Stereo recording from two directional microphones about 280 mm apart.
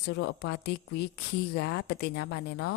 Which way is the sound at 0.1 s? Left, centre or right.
Left.